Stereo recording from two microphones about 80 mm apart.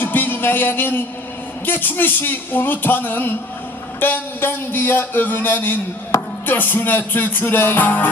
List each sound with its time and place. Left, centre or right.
0.0 s music: left